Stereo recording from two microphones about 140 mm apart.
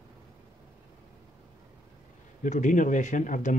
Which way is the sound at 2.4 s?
60° left (ahead or behind).